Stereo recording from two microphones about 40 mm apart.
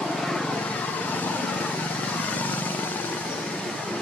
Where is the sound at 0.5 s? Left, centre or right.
Left.